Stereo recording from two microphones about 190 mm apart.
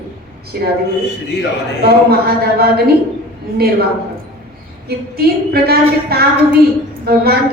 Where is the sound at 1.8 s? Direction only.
55° right (ahead or behind).